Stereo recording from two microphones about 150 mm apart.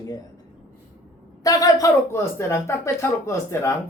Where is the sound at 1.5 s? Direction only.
25° left (ahead or behind).